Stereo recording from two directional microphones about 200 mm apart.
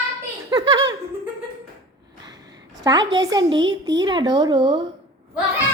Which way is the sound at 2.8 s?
20° right (ahead or behind).